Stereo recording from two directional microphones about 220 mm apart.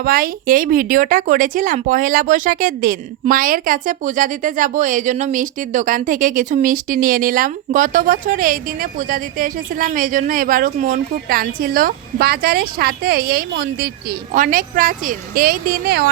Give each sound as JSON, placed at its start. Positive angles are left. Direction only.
{"t": 0.0, "sound": "speech", "side_deg": -40}